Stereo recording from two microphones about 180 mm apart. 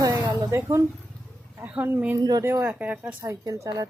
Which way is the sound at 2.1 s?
20° right (ahead or behind).